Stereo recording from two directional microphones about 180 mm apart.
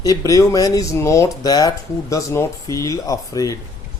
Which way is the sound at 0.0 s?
20° left (ahead or behind).